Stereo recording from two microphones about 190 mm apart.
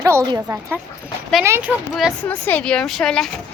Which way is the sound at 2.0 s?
5° left (ahead or behind).